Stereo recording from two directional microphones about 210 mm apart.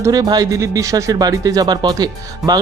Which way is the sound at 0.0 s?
15° right (ahead or behind).